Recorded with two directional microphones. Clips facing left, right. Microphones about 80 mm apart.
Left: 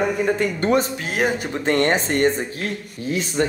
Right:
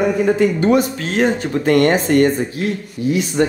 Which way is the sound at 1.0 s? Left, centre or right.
Centre.